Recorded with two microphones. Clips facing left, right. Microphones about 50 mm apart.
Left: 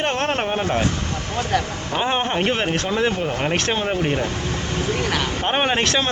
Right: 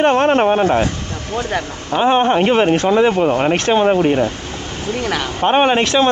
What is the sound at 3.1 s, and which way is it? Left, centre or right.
Speech, right.